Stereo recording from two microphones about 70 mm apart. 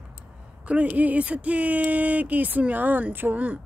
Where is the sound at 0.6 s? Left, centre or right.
Right.